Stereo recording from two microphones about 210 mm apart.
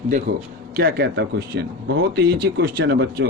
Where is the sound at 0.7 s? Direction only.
50° right (ahead or behind).